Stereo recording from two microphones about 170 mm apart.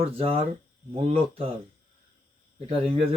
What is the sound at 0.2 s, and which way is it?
Speech, 35° right (ahead or behind).